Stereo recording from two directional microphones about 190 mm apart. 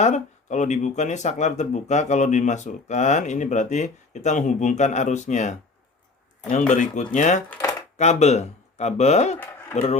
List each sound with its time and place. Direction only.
0.0 s speech: 40° left (ahead or behind)
7.5 s chopping: 15° left (ahead or behind)
7.9 s speech: 35° left (ahead or behind)
9.4 s a sound: 10° left (ahead or behind)
9.7 s speech: 35° left (ahead or behind)